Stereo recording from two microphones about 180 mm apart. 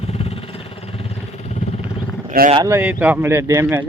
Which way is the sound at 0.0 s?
35° left (ahead or behind).